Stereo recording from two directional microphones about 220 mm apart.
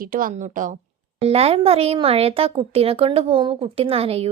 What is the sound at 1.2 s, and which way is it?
A woman's voice, 25° right (ahead or behind).